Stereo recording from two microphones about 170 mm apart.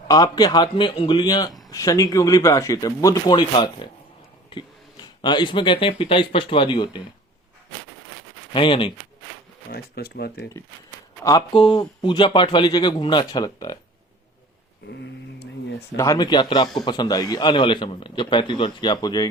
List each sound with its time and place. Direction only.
0.1 s a man's voice: 20° left (ahead or behind)
5.2 s a man's voice: 25° left (ahead or behind)
8.5 s speech: 30° left (ahead or behind)
9.6 s speech: 65° left (ahead or behind)
11.2 s a man's voice: 20° left (ahead or behind)
14.8 s a sound: 80° left
16.0 s a man's voice: 20° left (ahead or behind)